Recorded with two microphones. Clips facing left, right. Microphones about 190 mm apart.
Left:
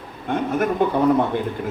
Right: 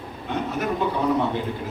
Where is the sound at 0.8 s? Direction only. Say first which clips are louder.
Left 6 dB; 55° left (ahead or behind).